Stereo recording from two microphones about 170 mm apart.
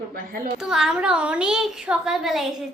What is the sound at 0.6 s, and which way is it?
A woman's voice, 5° right (ahead or behind).